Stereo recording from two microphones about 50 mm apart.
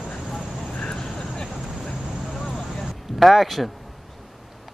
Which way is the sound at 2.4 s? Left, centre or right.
Centre.